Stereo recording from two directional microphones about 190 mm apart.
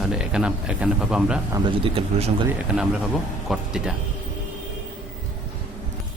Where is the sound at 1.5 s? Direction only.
25° right (ahead or behind).